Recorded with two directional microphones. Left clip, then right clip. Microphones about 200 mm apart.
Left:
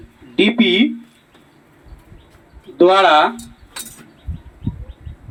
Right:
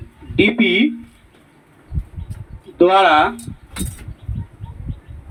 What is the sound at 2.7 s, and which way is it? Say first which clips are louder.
Speech: left 1 dB; 40° left (ahead or behind).